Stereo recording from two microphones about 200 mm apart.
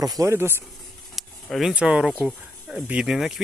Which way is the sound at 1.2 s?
Centre (ahead or behind).